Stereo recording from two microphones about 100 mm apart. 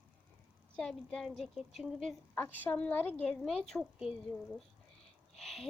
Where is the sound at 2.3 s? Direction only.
20° left (ahead or behind).